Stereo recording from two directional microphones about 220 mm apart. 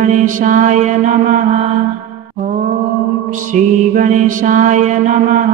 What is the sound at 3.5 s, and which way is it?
Mantra, 35° right (ahead or behind).